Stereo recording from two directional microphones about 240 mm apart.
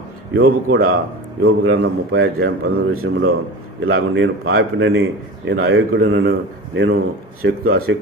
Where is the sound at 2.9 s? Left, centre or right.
Right.